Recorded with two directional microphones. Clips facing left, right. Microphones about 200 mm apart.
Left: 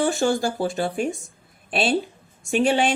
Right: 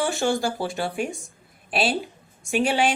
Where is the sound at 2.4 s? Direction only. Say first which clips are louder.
Left 2 dB; 40° left (ahead or behind).